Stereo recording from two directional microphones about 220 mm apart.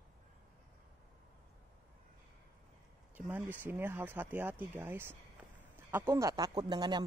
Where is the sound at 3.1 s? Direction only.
10° right (ahead or behind).